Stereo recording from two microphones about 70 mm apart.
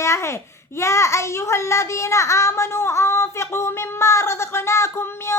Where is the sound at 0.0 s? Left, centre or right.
Left.